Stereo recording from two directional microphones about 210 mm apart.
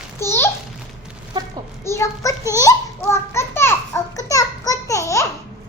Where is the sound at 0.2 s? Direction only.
10° left (ahead or behind).